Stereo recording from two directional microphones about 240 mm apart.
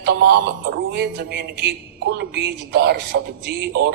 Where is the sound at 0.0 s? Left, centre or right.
Right.